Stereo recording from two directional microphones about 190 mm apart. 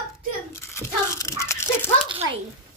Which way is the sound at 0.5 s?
15° left (ahead or behind).